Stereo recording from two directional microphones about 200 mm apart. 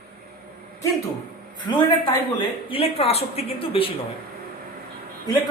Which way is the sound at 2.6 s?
30° left (ahead or behind).